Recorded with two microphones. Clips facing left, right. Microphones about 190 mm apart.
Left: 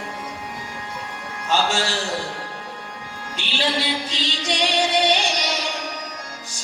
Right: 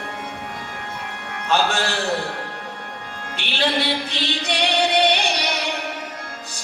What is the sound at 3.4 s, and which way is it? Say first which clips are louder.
Speech: right 2 dB; 60° right (ahead or behind).